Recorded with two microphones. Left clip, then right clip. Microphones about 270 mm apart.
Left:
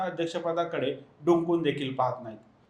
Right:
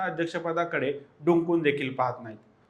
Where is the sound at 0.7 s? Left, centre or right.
Right.